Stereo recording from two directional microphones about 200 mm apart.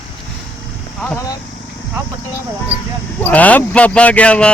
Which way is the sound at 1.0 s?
15° left (ahead or behind).